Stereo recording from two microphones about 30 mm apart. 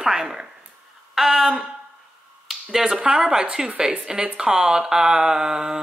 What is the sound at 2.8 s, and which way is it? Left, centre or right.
Speech, right.